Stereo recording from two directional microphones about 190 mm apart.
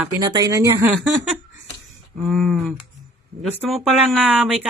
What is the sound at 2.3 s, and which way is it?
Speech, centre (ahead or behind).